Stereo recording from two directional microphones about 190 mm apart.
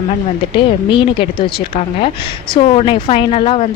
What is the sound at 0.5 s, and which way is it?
Speech, 25° left (ahead or behind).